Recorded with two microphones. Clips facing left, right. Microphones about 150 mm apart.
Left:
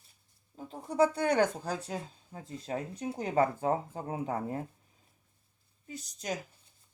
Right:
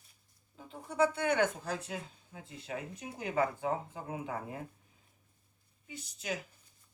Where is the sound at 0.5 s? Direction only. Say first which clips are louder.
Left 4 dB; 40° left (ahead or behind).